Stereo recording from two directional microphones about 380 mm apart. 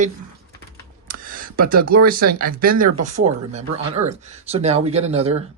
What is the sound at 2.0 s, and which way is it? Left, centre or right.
Speech, right.